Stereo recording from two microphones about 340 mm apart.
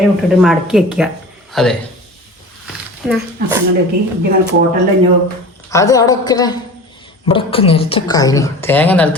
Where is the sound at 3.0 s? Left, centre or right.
Centre.